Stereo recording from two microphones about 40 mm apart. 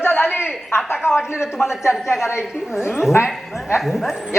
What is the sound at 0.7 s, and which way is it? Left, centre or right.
Speech, left.